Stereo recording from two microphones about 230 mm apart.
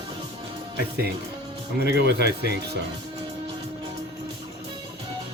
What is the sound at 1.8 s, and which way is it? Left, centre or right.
Speech, right.